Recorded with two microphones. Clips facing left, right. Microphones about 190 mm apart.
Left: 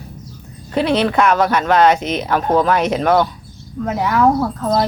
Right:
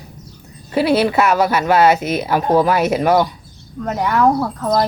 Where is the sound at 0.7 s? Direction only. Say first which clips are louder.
Right 1 dB; 10° right (ahead or behind).